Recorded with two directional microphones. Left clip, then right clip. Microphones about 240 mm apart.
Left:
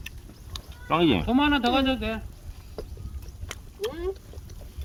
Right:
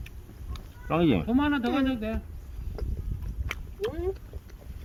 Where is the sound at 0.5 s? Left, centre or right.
Centre.